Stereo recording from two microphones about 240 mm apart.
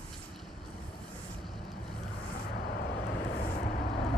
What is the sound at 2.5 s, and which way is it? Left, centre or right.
Vehicle, left.